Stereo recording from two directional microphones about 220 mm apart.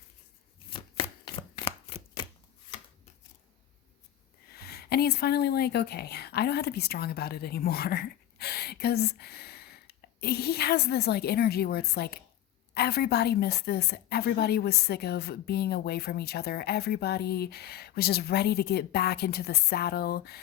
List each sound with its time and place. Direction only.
0.7 s chopping: 25° left (ahead or behind)
4.5 s a woman's voice: 45° left (ahead or behind)